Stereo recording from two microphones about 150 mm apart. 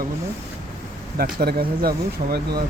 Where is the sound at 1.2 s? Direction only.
85° right.